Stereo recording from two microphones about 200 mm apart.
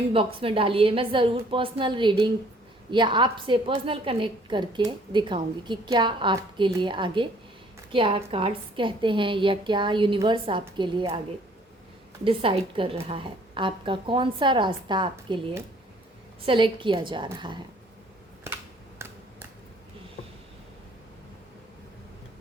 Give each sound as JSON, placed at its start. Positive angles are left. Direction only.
{"t": 0.3, "sound": "a woman's voice", "side_deg": -25}
{"t": 12.2, "sound": "a woman's voice", "side_deg": -25}